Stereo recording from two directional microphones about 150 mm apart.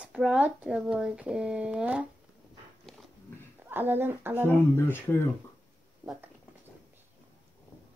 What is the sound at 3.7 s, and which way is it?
Speech, 15° right (ahead or behind).